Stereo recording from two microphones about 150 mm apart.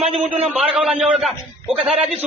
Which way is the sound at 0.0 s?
40° right (ahead or behind).